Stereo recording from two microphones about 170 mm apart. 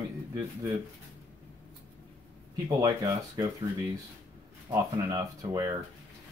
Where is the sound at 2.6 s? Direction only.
20° right (ahead or behind).